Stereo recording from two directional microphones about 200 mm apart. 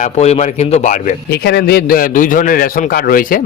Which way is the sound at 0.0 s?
35° left (ahead or behind).